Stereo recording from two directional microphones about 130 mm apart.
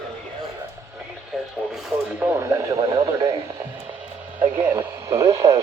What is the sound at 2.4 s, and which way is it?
Speech, 20° right (ahead or behind).